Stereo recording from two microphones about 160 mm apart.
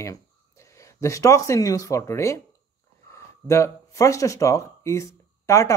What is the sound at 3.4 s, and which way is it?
Speech, 20° left (ahead or behind).